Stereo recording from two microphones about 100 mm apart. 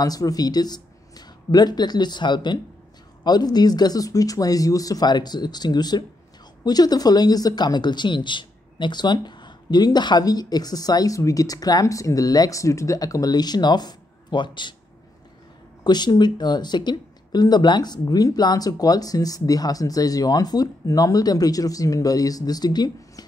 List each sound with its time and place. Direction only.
0.0 s speech: 40° left (ahead or behind)
15.8 s speech: 45° left (ahead or behind)